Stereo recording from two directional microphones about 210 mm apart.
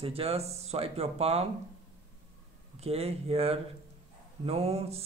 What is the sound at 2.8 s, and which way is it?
Speech, 30° right (ahead or behind).